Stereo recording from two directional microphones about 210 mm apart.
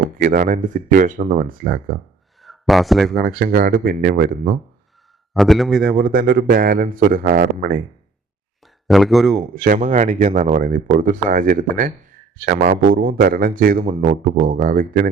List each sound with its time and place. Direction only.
0.2 s speech: 40° right (ahead or behind)
2.4 s a sound: centre (ahead or behind)
3.2 s speech: 45° right (ahead or behind)
5.3 s a man's voice: centre (ahead or behind)
5.8 s speech: 45° right (ahead or behind)
8.6 s speech: centre (ahead or behind)
9.6 s speech: 35° right (ahead or behind)